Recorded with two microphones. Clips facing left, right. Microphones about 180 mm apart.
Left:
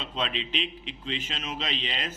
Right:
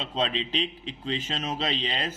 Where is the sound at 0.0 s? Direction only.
35° right (ahead or behind).